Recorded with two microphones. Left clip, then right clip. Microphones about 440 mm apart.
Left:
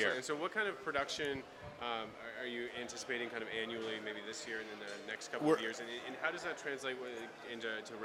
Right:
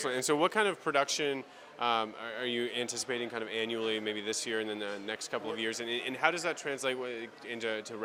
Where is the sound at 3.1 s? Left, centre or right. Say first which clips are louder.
Right 2 dB; right.